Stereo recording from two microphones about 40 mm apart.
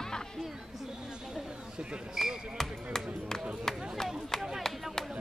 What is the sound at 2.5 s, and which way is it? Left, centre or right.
Speech, centre.